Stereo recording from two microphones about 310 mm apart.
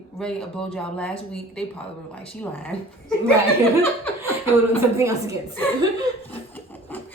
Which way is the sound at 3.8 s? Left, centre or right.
Centre.